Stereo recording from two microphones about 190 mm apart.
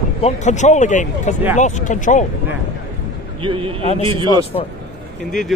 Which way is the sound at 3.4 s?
25° right (ahead or behind).